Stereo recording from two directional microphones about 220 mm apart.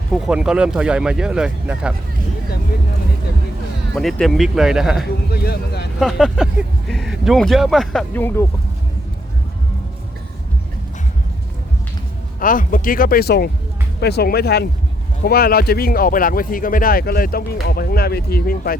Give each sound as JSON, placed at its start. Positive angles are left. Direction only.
{"t": 0.1, "sound": "speech", "side_deg": -5}
{"t": 3.9, "sound": "speech", "side_deg": 0}
{"t": 5.3, "sound": "a sound", "side_deg": 45}
{"t": 6.0, "sound": "speech", "side_deg": 0}
{"t": 12.4, "sound": "speech", "side_deg": 40}